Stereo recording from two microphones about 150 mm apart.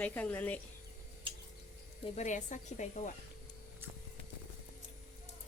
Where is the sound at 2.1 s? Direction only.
55° left (ahead or behind).